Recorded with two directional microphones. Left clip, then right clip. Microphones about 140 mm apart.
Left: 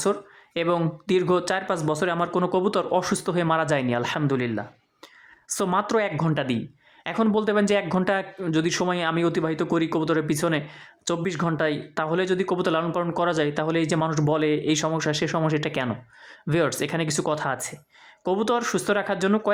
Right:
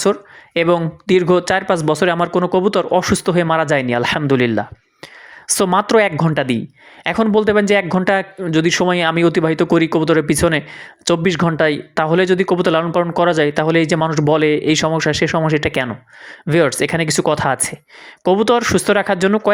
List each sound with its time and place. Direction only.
0.0 s speech: 35° right (ahead or behind)